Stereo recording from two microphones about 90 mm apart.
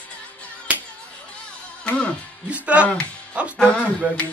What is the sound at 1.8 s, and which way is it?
Music, 15° left (ahead or behind).